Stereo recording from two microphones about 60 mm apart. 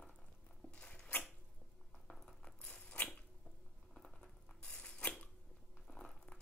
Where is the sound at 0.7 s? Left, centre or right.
Centre.